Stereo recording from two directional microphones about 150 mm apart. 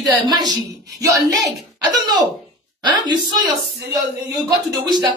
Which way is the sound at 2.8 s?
30° right (ahead or behind).